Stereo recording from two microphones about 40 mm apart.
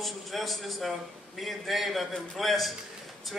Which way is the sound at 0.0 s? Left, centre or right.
Centre.